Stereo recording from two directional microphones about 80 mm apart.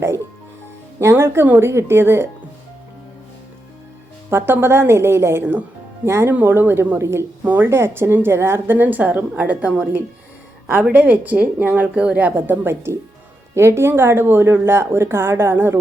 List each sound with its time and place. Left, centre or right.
0.9 s speech: right
4.3 s speech: right